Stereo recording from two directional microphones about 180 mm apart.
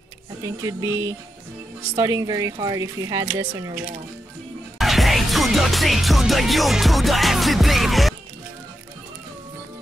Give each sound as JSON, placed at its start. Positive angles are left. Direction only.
{"t": 0.4, "sound": "speech", "side_deg": -20}
{"t": 4.7, "sound": "music", "side_deg": 0}